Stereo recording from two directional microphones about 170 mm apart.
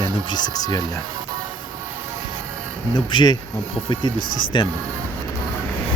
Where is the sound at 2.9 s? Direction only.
25° left (ahead or behind).